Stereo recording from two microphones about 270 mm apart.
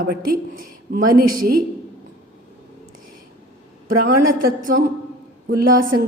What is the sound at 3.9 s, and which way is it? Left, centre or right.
Speech, right.